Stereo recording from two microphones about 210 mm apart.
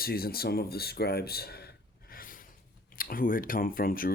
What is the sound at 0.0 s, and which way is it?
Speech, 45° left (ahead or behind).